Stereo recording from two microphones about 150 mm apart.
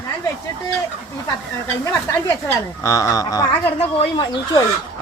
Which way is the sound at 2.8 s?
20° left (ahead or behind).